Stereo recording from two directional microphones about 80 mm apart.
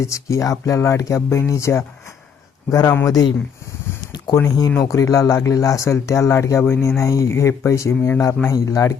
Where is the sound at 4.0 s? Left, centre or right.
Left.